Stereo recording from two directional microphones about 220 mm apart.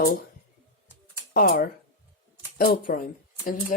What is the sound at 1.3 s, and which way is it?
Speech, 40° left (ahead or behind).